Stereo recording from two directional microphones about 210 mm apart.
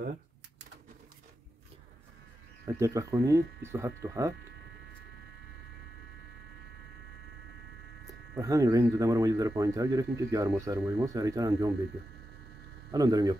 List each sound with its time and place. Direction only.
2.6 s speech: 15° right (ahead or behind)
8.4 s speech: 15° right (ahead or behind)
12.9 s speech: 20° right (ahead or behind)